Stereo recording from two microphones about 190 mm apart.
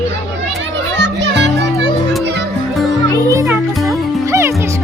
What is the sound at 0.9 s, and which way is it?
Music, 65° right (ahead or behind).